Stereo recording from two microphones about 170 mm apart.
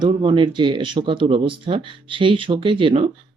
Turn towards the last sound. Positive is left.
turn(degrees=-30)  # may be behind; listen again after turning